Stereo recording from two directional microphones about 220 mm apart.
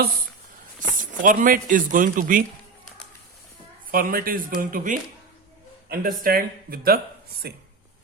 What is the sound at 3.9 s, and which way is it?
A man's voice, 40° right (ahead or behind).